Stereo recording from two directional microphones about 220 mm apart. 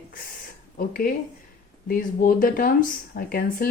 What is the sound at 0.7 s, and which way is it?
Speech, 40° left (ahead or behind).